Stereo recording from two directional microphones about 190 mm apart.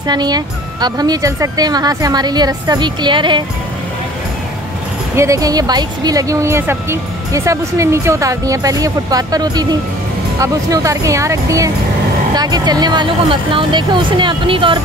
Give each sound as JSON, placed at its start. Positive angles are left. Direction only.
{"t": 0.0, "sound": "speech", "side_deg": -20}
{"t": 5.1, "sound": "speech", "side_deg": -15}